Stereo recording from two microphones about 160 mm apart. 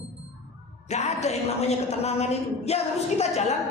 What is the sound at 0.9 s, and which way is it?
A woman's voice, 45° left (ahead or behind).